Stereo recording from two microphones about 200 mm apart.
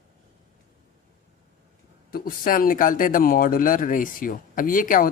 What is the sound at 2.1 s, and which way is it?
Speech, 45° left (ahead or behind).